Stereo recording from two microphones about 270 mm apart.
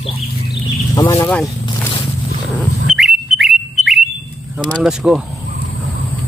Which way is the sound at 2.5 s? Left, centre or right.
Centre.